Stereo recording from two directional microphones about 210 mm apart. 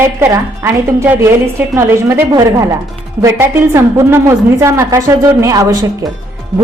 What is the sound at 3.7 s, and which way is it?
A woman's voice, 15° right (ahead or behind).